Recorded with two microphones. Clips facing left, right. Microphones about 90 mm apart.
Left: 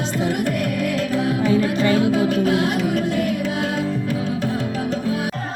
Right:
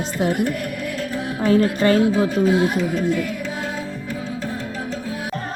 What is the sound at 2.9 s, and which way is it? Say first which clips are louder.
Music: left 1 dB; 65° left (ahead or behind).